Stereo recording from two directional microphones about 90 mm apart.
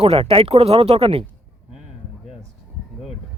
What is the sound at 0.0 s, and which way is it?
Speech, 90° right.